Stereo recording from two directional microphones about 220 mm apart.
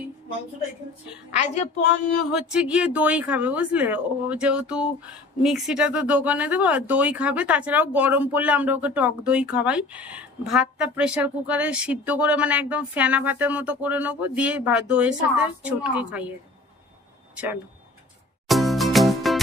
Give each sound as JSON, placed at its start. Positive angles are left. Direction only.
{"t": 1.3, "sound": "a woman's voice", "side_deg": 30}
{"t": 2.3, "sound": "speech", "side_deg": -5}
{"t": 18.5, "sound": "music", "side_deg": 0}